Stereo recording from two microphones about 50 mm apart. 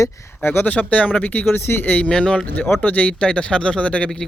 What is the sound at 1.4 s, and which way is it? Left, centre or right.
Speech, left.